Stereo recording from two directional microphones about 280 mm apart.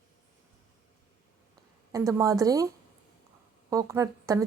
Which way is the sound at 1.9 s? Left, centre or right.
Centre.